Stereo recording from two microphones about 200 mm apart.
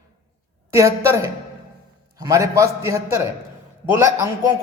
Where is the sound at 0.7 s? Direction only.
15° right (ahead or behind).